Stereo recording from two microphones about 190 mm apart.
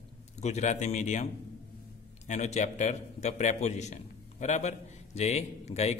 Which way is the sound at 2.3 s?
40° left (ahead or behind).